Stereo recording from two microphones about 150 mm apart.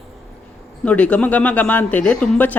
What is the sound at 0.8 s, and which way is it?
Speech, 10° left (ahead or behind).